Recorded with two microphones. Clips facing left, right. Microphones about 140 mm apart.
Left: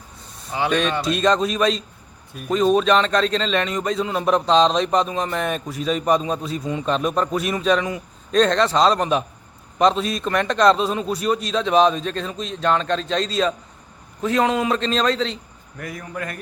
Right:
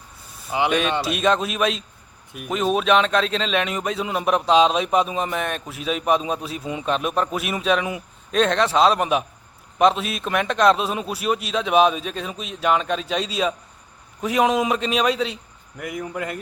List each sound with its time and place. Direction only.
0.7 s a man's voice: 5° right (ahead or behind)